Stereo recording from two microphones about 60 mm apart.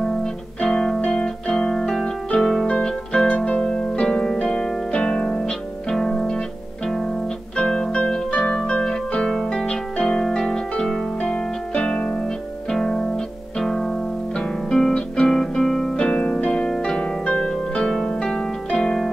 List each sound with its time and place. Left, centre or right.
0.0 s music: centre
3.3 s harp: left
7.5 s music: centre
8.6 s harp: centre
12.7 s music: centre
16.7 s harp: centre